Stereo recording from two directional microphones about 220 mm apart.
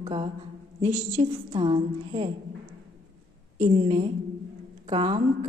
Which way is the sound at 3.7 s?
30° right (ahead or behind).